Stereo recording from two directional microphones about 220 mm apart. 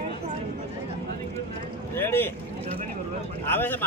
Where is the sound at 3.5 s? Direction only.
10° left (ahead or behind).